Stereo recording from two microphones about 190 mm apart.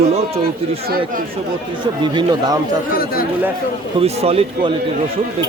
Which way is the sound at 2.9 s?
50° left (ahead or behind).